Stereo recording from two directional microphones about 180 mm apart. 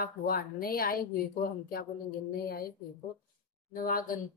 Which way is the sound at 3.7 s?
50° left (ahead or behind).